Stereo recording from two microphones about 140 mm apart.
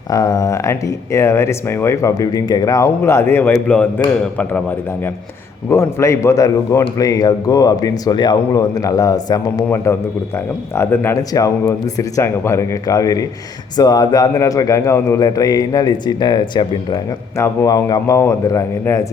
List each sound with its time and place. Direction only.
0.1 s a man's voice: 25° left (ahead or behind)
5.7 s a man's voice: 20° left (ahead or behind)